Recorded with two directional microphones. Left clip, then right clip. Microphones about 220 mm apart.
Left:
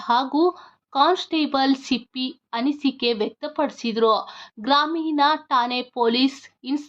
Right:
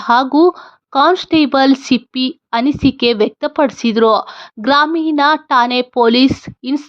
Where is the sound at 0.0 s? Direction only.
30° right (ahead or behind).